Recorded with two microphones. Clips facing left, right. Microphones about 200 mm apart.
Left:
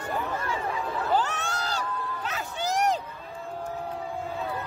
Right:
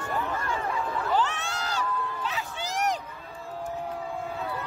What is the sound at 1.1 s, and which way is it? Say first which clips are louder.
Crowd: even; 40° left (ahead or behind).